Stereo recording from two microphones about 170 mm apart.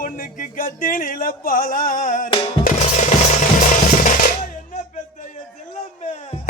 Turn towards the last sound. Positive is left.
turn(degrees=45)  # may be behind; listen again after turning